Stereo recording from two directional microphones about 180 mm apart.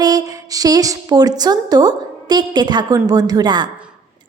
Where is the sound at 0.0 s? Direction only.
20° right (ahead or behind).